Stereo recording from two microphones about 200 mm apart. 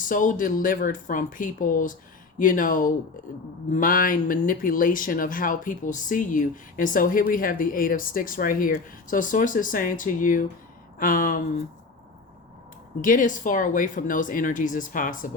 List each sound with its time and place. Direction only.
0.0 s speech: 40° left (ahead or behind)
13.0 s speech: 40° left (ahead or behind)